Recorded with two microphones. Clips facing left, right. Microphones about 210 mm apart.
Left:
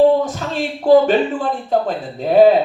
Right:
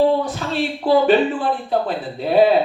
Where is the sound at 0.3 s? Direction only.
45° left (ahead or behind).